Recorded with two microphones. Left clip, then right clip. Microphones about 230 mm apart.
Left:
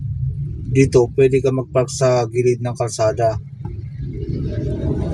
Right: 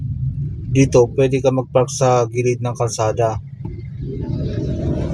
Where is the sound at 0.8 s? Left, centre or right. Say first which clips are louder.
Even; centre.